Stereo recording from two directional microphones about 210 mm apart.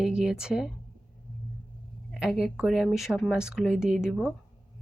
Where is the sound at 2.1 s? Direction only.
Centre (ahead or behind).